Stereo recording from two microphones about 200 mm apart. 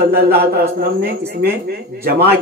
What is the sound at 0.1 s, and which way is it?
Speech, 50° right (ahead or behind).